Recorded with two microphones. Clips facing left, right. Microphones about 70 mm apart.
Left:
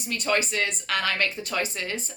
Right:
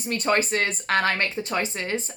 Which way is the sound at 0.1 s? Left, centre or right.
Right.